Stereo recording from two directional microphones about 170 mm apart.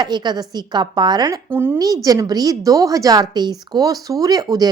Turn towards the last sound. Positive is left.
turn(degrees=-20)  # may be behind; listen again after turning